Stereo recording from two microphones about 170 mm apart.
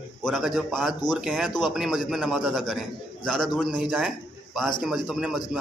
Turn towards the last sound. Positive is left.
turn(degrees=-5)  # may be behind; listen again after turning